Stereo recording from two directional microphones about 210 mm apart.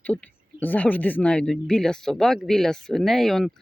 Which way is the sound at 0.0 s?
5° left (ahead or behind).